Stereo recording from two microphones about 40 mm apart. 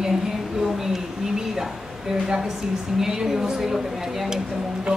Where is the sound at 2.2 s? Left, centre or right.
Centre.